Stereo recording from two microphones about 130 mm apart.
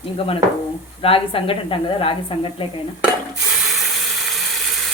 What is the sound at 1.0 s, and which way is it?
A woman's voice, 45° left (ahead or behind).